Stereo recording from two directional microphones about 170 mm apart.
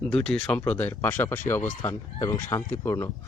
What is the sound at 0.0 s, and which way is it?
Speech, 5° left (ahead or behind).